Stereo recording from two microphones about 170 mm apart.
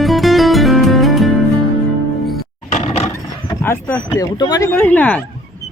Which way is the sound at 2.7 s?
40° left (ahead or behind).